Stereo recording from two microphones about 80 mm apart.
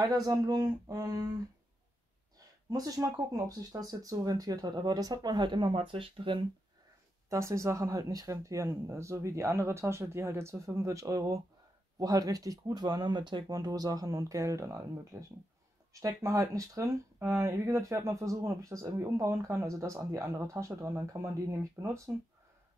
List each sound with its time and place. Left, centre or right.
0.0 s speech: right
2.7 s speech: right
7.2 s speech: right
13.5 s speech: right